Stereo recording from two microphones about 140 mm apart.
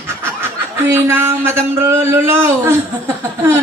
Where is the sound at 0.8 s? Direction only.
15° right (ahead or behind).